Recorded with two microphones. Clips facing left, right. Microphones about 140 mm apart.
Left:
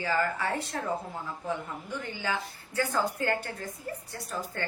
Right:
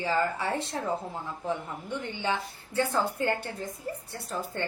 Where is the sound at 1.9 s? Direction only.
25° right (ahead or behind).